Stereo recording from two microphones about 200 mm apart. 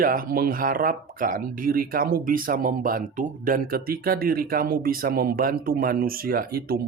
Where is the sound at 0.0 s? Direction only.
45° right (ahead or behind).